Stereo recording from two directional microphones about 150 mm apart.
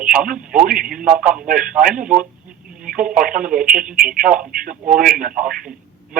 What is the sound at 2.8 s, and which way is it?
Telephone, 60° right (ahead or behind).